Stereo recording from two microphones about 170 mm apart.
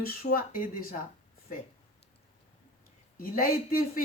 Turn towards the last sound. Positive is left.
turn(degrees=60)  # may be behind; listen again after turning